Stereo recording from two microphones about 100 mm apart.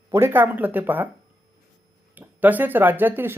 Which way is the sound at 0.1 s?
25° right (ahead or behind).